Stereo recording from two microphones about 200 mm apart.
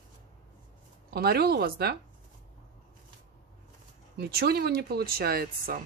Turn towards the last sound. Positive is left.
turn(degrees=-45)  # may be behind; listen again after turning